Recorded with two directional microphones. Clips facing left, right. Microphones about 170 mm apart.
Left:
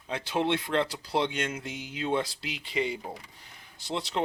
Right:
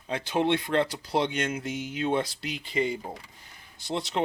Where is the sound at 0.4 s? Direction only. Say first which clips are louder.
Right 3 dB; 50° right (ahead or behind).